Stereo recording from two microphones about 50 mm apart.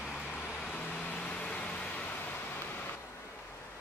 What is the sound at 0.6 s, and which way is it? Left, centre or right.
Vehicle, left.